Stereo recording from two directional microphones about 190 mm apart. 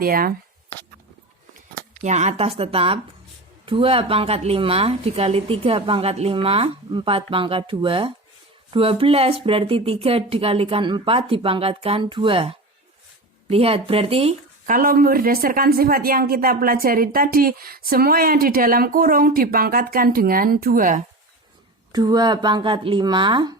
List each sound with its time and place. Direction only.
0.0 s speech: 50° right (ahead or behind)
2.0 s speech: 40° right (ahead or behind)
14.7 s speech: 45° right (ahead or behind)
21.9 s speech: 20° right (ahead or behind)